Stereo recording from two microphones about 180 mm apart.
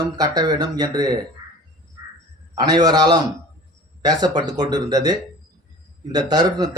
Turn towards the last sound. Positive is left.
turn(degrees=-25)  # may be behind; listen again after turning